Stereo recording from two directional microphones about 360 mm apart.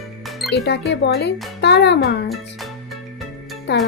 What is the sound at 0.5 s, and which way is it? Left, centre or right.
Speech, left.